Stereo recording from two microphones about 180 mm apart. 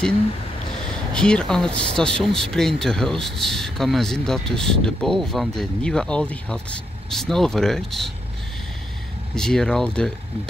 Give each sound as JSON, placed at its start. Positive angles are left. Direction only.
{"t": 0.8, "sound": "speech", "side_deg": 5}
{"t": 9.3, "sound": "speech", "side_deg": 5}